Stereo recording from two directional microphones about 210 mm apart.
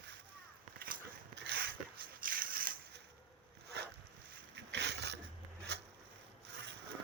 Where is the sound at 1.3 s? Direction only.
55° right (ahead or behind).